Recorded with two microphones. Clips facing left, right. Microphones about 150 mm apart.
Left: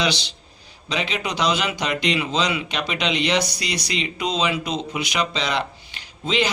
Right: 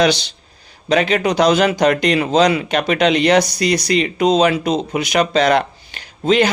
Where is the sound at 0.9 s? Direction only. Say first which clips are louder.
Right 11 dB; 50° right (ahead or behind).